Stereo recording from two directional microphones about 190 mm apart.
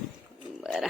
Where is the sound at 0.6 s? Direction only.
Centre (ahead or behind).